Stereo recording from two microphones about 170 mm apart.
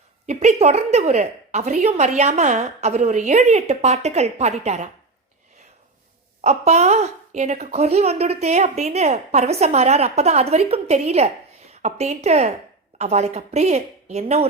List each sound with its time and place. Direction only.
0.3 s a woman's voice: 40° right (ahead or behind)
6.4 s a woman's voice: 40° right (ahead or behind)